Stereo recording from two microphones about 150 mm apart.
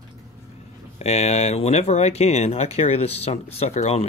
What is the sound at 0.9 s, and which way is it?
Speech, 50° left (ahead or behind).